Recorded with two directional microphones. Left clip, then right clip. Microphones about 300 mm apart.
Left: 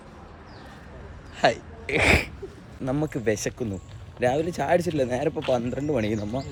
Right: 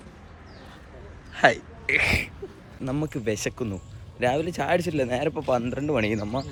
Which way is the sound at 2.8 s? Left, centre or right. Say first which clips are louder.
Left 3 dB; centre.